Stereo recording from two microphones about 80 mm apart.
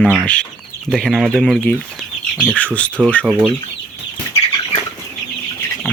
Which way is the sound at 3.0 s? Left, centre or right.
Centre.